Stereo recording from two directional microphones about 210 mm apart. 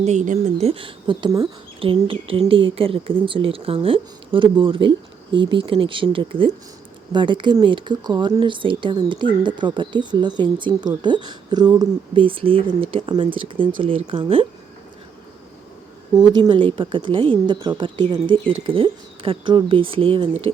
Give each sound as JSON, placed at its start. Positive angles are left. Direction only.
{"t": 0.0, "sound": "speech", "side_deg": -35}
{"t": 16.4, "sound": "speech", "side_deg": -25}